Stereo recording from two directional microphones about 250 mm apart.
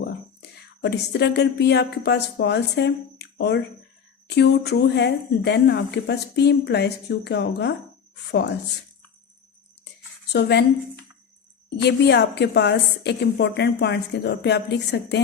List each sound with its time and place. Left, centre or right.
0.8 s speech: left
10.3 s speech: left
11.8 s a woman's voice: left